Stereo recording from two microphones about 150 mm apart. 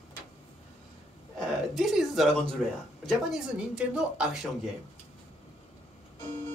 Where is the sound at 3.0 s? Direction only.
5° right (ahead or behind).